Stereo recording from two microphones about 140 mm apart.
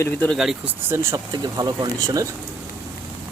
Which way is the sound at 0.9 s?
20° right (ahead or behind).